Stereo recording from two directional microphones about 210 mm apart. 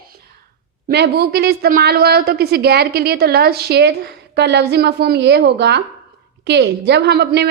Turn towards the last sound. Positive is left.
turn(degrees=-50)  # may be behind; listen again after turning